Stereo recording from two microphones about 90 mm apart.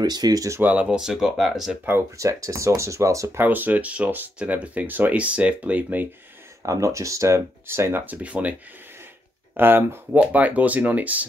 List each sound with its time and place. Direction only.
0.0 s speech: 50° right (ahead or behind)
0.6 s speech: 15° right (ahead or behind)
2.1 s speech: 35° right (ahead or behind)
3.4 s speech: 20° right (ahead or behind)
6.6 s speech: 35° right (ahead or behind); by 8.5 s 15° right (ahead or behind)
9.6 s speech: 25° right (ahead or behind)